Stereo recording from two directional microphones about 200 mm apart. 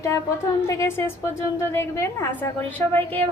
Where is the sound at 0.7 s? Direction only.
10° left (ahead or behind).